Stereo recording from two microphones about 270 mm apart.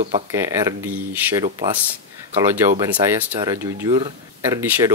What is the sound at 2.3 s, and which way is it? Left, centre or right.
Speech, centre.